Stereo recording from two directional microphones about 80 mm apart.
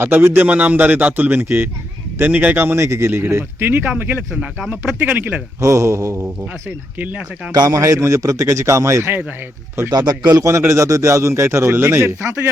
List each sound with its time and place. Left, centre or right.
0.0 s a man's voice: right
2.7 s a man's voice: right
5.5 s a man's voice: right
7.0 s a man's voice: centre
7.5 s a man's voice: right
7.8 s a man's voice: right
9.9 s a man's voice: right
10.3 s a man's voice: right